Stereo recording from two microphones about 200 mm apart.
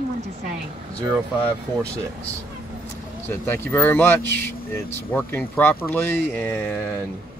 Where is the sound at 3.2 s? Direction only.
10° left (ahead or behind).